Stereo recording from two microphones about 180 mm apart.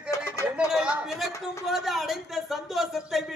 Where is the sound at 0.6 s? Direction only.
5° right (ahead or behind).